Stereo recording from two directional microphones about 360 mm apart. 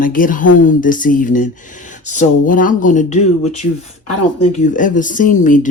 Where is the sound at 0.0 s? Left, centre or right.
Left.